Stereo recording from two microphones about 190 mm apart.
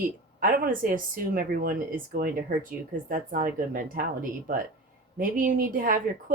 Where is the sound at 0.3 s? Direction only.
50° right (ahead or behind).